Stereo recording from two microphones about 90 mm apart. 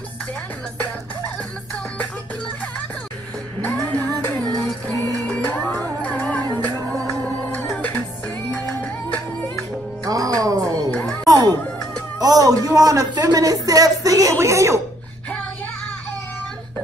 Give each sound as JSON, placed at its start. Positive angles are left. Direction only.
{"t": 3.6, "sound": "music", "side_deg": 15}
{"t": 5.4, "sound": "music", "side_deg": 20}
{"t": 10.0, "sound": "music", "side_deg": -40}
{"t": 10.9, "sound": "music", "side_deg": 15}
{"t": 11.2, "sound": "music", "side_deg": -45}
{"t": 12.2, "sound": "a sound", "side_deg": -45}
{"t": 13.1, "sound": "music", "side_deg": -45}
{"t": 14.4, "sound": "a sound", "side_deg": -35}